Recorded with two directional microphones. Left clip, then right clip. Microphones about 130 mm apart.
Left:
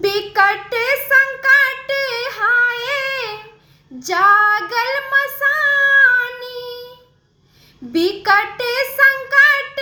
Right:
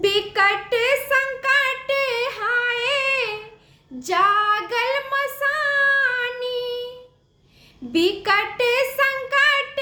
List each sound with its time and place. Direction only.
0.0 s a sound: 10° right (ahead or behind)
2.1 s child singing: 15° right (ahead or behind)
2.6 s child singing: 45° right (ahead or behind)
2.8 s child singing: 10° right (ahead or behind)
7.9 s a sound: 15° right (ahead or behind)
8.7 s child singing: 15° right (ahead or behind)